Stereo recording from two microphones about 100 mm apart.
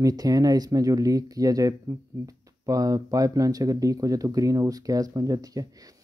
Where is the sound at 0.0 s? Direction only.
40° right (ahead or behind).